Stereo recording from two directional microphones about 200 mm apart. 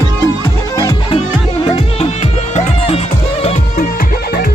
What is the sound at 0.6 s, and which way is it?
Music, 20° left (ahead or behind).